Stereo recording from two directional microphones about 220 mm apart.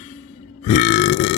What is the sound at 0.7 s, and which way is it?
Burping, 35° left (ahead or behind).